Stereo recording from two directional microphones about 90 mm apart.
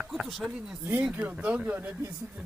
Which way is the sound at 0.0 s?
5° right (ahead or behind).